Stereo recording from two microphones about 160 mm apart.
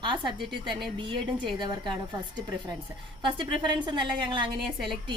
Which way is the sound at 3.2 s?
30° right (ahead or behind).